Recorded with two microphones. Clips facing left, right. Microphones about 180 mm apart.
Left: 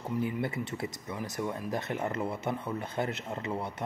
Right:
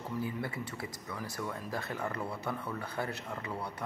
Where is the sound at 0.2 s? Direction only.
20° left (ahead or behind).